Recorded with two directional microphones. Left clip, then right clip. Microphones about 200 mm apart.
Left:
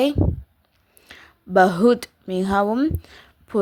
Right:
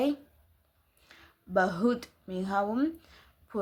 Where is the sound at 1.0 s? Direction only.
45° left (ahead or behind).